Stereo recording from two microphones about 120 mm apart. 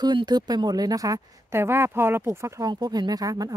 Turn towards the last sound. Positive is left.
turn(degrees=-30)  # may be behind; listen again after turning